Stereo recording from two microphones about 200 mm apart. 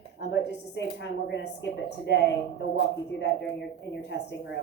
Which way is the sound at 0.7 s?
65° left (ahead or behind).